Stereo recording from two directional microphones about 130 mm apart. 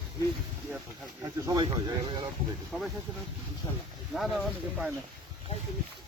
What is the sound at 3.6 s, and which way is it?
Speech, 30° left (ahead or behind).